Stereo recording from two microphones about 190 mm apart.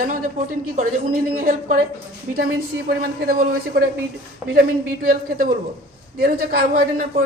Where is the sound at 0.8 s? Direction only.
45° right (ahead or behind).